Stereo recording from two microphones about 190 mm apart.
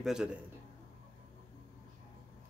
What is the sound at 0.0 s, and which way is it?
Speech, 5° right (ahead or behind).